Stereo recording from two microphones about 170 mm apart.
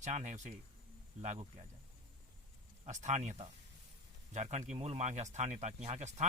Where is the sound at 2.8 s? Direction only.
45° right (ahead or behind).